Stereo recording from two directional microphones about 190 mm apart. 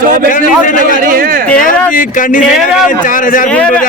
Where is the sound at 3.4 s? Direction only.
5° left (ahead or behind).